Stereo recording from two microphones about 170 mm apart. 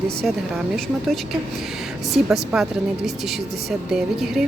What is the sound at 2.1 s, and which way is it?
Speech, centre (ahead or behind).